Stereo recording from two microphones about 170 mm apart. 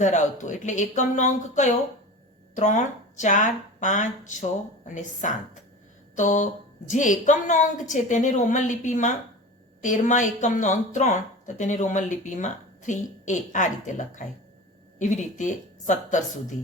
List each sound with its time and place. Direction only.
0.0 s a woman's voice: 45° left (ahead or behind)